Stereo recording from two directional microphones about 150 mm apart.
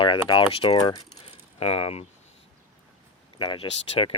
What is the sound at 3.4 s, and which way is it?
Speech, 35° left (ahead or behind).